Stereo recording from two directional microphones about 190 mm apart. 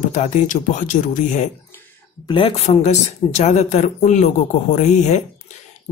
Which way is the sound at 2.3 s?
30° left (ahead or behind).